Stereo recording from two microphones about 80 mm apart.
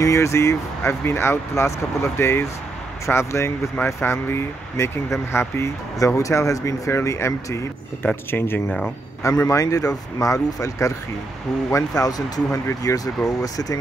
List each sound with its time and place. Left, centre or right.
0.0 s speech: left
8.3 s speech: left
8.6 s speech: centre
9.2 s speech: left